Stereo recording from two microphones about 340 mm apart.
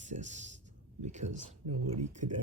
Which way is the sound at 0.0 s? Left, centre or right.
Right.